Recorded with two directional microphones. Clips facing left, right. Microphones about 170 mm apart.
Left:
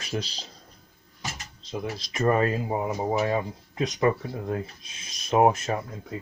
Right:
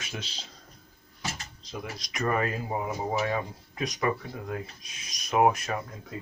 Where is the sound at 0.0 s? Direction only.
35° left (ahead or behind).